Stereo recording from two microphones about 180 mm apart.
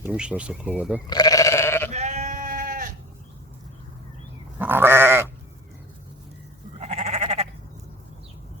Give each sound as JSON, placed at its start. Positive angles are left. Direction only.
{"t": 0.0, "sound": "speech", "side_deg": -5}
{"t": 1.0, "sound": "sheep", "side_deg": 20}
{"t": 1.9, "sound": "sheep", "side_deg": -40}
{"t": 4.6, "sound": "goat", "side_deg": -10}
{"t": 6.7, "sound": "sheep", "side_deg": -35}